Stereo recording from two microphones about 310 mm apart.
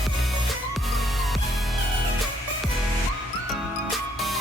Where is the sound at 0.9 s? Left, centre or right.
Centre.